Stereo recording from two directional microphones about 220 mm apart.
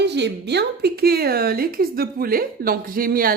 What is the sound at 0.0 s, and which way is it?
A woman's voice, 50° right (ahead or behind).